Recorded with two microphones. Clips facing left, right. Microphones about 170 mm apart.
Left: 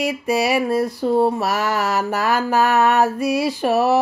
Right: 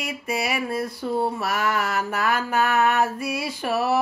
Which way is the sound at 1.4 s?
30° left (ahead or behind).